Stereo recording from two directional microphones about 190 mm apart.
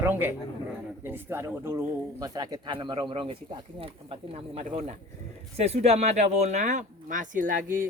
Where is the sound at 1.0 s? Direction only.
10° right (ahead or behind).